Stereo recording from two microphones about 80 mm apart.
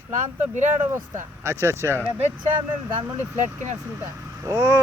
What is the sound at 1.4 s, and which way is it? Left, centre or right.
Speech, right.